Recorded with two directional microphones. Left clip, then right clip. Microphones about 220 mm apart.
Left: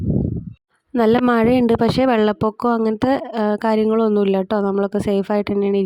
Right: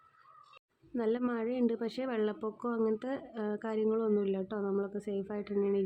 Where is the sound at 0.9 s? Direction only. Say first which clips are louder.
Left 18 dB; 50° left (ahead or behind).